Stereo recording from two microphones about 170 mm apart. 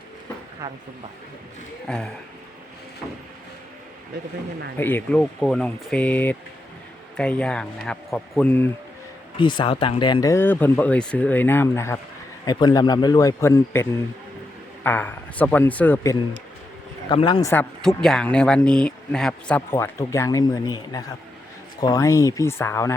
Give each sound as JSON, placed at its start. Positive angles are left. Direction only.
{"t": 1.9, "sound": "speech", "side_deg": 5}
{"t": 4.8, "sound": "speech", "side_deg": 10}
{"t": 9.4, "sound": "a man's voice", "side_deg": 25}
{"t": 14.8, "sound": "speech", "side_deg": 10}
{"t": 17.1, "sound": "a man's voice", "side_deg": 30}
{"t": 17.4, "sound": "speech", "side_deg": 10}
{"t": 19.7, "sound": "a man's voice", "side_deg": 20}